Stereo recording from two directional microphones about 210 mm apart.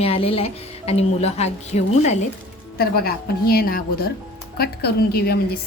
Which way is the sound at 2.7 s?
45° left (ahead or behind).